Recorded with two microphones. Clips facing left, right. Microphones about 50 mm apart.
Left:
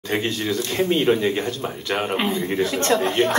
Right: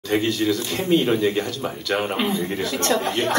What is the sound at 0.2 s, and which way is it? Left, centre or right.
A woman's voice, left.